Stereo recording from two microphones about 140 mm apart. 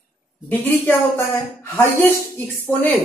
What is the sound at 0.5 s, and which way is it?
A woman's voice, 10° left (ahead or behind).